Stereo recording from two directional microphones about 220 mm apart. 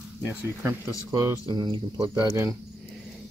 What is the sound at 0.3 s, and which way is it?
Speech, 5° right (ahead or behind).